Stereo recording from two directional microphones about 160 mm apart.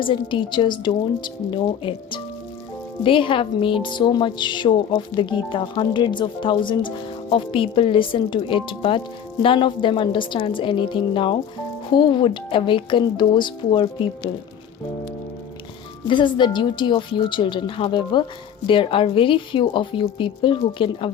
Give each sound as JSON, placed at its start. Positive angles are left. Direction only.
{"t": 0.0, "sound": "a woman's voice", "side_deg": 30}
{"t": 16.0, "sound": "a woman's voice", "side_deg": 30}